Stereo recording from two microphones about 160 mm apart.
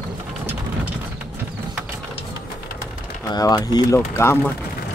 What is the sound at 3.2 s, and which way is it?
Speech, 25° left (ahead or behind).